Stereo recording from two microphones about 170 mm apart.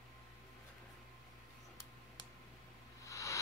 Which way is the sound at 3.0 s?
20° left (ahead or behind).